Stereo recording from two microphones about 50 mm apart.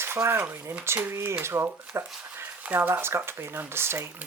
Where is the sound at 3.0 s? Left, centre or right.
Right.